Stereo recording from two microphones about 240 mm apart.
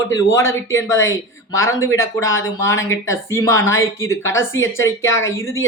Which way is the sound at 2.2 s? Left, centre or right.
Left.